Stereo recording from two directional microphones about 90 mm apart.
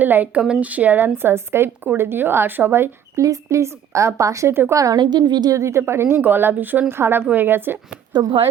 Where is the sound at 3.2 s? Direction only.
40° right (ahead or behind).